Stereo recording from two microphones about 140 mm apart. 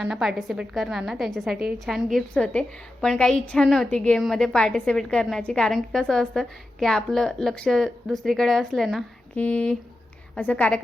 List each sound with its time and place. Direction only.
0.0 s a woman's voice: 5° right (ahead or behind)